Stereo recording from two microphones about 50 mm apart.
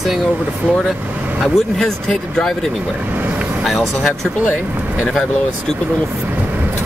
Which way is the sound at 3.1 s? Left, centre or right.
Right.